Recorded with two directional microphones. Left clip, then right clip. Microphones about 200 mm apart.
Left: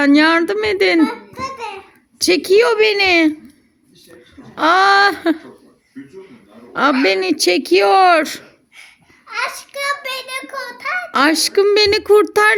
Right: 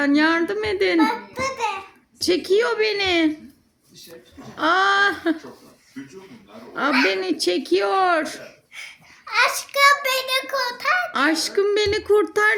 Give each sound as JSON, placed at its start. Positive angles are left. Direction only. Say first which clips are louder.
{"t": 0.0, "sound": "a woman's voice", "louder": "left 6 dB", "side_deg": 40}
{"t": 0.9, "sound": "babbling", "louder": "left 3 dB", "side_deg": -15}
{"t": 2.1, "sound": "a woman's voice", "louder": "left 7 dB", "side_deg": 40}
{"t": 4.5, "sound": "a woman's voice", "louder": "left 6 dB", "side_deg": 40}
{"t": 7.0, "sound": "a woman's voice", "louder": "left 6 dB", "side_deg": 40}
{"t": 8.4, "sound": "a child's voice", "louder": "right 4 dB", "side_deg": -15}
{"t": 11.1, "sound": "a woman's voice", "louder": "left 6 dB", "side_deg": 40}